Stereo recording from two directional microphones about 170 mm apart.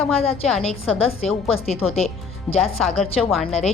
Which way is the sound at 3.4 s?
40° left (ahead or behind).